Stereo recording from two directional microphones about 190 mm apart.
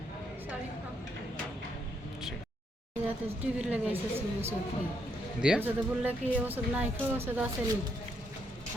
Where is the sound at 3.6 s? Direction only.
5° right (ahead or behind).